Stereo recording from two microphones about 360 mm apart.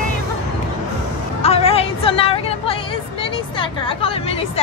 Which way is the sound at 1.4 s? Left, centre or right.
Centre.